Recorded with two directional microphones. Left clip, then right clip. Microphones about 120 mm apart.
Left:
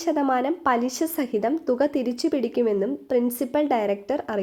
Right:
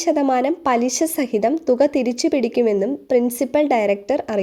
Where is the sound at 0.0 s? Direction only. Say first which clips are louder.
Right 5 dB; 45° right (ahead or behind).